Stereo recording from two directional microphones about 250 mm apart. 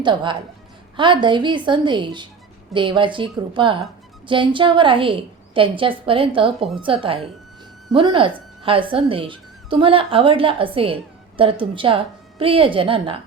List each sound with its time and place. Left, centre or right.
0.0 s speech: centre